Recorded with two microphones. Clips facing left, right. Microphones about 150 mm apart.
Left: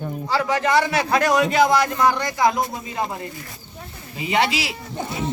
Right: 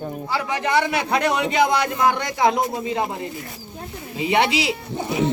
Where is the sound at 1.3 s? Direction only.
20° right (ahead or behind).